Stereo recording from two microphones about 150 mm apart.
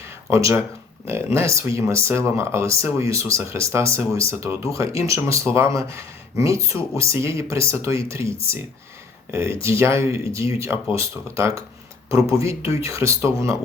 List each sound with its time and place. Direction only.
0.3 s speech: 20° right (ahead or behind)